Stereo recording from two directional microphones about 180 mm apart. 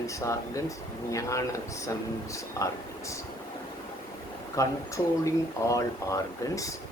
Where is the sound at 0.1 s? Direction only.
15° left (ahead or behind).